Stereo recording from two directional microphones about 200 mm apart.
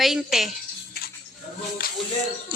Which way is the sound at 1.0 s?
50° left (ahead or behind).